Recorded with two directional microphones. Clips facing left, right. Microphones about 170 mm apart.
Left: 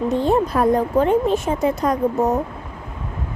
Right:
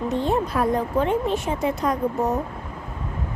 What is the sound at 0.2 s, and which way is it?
A woman's voice, 40° left (ahead or behind).